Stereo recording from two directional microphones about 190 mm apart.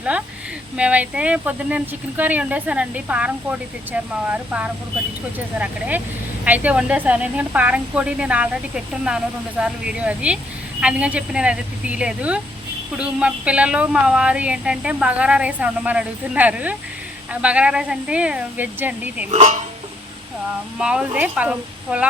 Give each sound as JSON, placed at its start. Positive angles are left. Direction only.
{"t": 0.8, "sound": "a woman's voice", "side_deg": -5}
{"t": 6.4, "sound": "a woman's voice", "side_deg": -10}
{"t": 19.3, "sound": "speech", "side_deg": -35}
{"t": 20.7, "sound": "a woman's voice", "side_deg": -5}